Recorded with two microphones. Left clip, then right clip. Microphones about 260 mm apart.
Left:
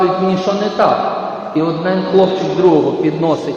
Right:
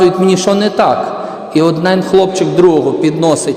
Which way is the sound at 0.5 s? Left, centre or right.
Right.